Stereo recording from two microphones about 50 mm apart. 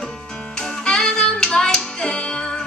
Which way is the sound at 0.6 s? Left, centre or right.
Centre.